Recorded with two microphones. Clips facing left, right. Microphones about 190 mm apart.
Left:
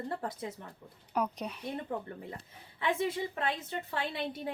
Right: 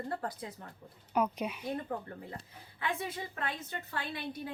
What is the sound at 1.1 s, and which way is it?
Speech, 5° right (ahead or behind).